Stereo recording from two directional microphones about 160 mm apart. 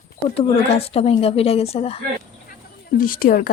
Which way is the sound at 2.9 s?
65° left (ahead or behind).